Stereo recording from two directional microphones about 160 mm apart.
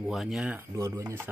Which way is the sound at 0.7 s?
20° right (ahead or behind).